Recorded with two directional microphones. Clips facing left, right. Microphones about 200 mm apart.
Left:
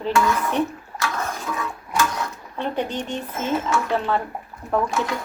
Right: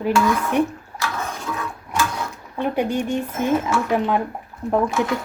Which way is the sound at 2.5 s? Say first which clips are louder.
Right 4 dB; 10° right (ahead or behind).